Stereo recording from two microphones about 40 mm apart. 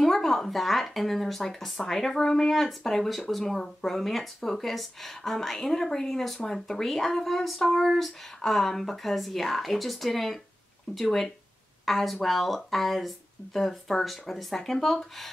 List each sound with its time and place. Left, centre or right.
0.0 s speech: centre
3.9 s a woman's voice: centre